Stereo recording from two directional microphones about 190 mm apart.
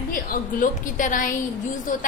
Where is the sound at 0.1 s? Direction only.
45° left (ahead or behind).